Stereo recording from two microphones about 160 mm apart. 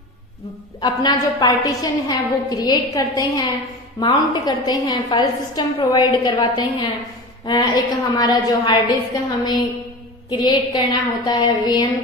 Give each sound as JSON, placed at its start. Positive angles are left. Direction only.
{"t": 0.7, "sound": "a woman's voice", "side_deg": 25}